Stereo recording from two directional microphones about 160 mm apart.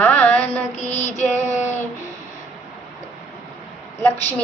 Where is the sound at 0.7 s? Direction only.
45° left (ahead or behind).